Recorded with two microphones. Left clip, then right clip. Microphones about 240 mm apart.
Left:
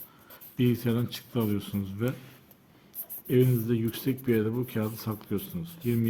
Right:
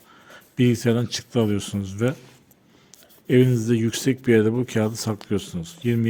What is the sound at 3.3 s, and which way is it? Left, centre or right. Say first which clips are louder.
Speech: right 7 dB; right.